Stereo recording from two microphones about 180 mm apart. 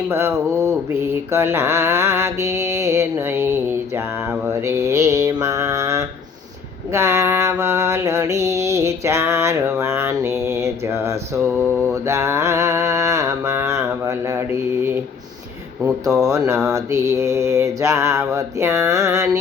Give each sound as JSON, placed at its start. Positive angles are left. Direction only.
{"t": 0.1, "sound": "mantra", "side_deg": -15}
{"t": 16.0, "sound": "speech", "side_deg": 0}
{"t": 16.3, "sound": "mantra", "side_deg": -20}